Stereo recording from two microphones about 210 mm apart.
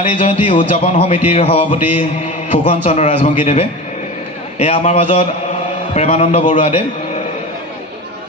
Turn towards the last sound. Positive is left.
turn(degrees=30)  # may be behind; listen again after turning